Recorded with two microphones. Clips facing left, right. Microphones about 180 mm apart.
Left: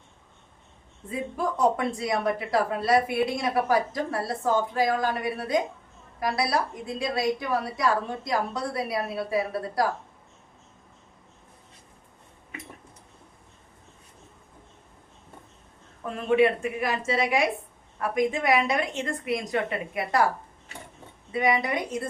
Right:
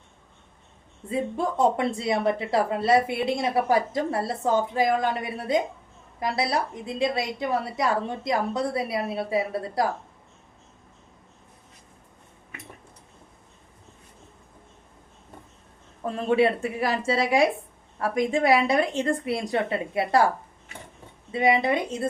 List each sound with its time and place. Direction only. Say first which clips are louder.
1.1 s speech: right 3 dB; 25° right (ahead or behind)
16.0 s a woman's voice: even; 30° right (ahead or behind)
21.3 s speech: right 3 dB; 25° right (ahead or behind)